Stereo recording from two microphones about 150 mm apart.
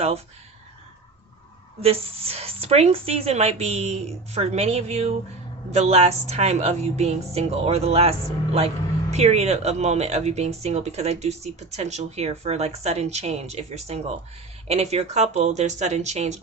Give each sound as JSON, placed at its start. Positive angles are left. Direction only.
{"t": 1.8, "sound": "speech", "side_deg": -40}